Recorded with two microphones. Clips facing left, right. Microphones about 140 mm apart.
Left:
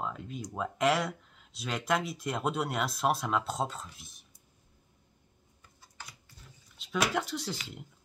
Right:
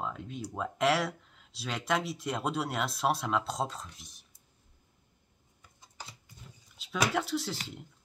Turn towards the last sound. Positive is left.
turn(degrees=0)  # may be behind; listen again after turning